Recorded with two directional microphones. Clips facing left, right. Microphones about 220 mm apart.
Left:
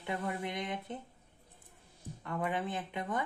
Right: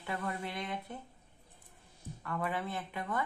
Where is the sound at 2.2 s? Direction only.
20° left (ahead or behind).